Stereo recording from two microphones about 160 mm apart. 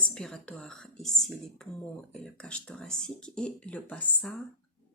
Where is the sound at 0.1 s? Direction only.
5° left (ahead or behind).